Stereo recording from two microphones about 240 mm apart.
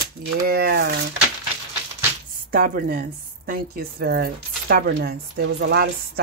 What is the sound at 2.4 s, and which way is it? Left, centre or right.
Speech, right.